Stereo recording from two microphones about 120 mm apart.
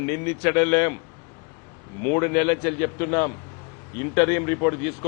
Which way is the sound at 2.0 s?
20° left (ahead or behind).